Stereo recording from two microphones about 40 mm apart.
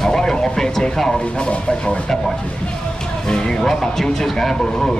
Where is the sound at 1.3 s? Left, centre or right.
Left.